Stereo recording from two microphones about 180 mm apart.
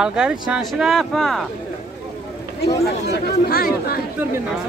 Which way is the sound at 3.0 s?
60° left (ahead or behind).